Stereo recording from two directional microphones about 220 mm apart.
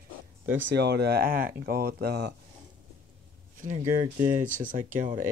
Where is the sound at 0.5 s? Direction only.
55° right (ahead or behind).